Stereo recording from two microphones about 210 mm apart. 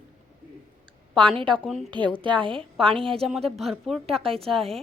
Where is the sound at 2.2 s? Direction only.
25° right (ahead or behind).